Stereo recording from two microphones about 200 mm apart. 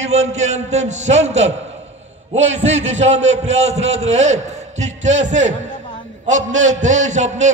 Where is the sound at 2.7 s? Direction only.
35° right (ahead or behind).